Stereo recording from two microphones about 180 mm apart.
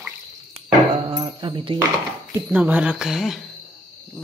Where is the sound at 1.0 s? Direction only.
25° right (ahead or behind).